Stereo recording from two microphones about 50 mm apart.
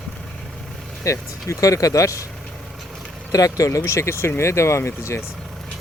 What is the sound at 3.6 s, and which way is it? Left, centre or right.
Speech, left.